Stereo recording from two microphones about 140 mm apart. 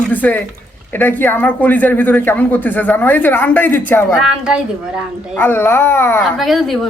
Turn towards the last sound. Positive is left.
turn(degrees=0)  # may be behind; listen again after turning